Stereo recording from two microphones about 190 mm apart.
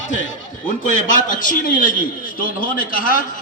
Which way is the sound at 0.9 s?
45° left (ahead or behind).